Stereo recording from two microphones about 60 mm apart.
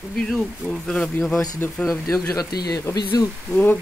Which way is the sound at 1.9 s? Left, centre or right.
Left.